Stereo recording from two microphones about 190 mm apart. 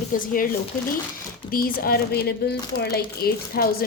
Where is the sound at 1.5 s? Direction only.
50° left (ahead or behind).